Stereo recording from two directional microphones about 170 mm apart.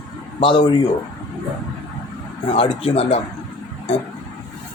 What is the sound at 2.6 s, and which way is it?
Speech, 35° left (ahead or behind).